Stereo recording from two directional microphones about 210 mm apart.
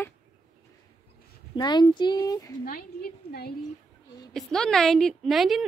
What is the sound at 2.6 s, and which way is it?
Speech, 45° left (ahead or behind).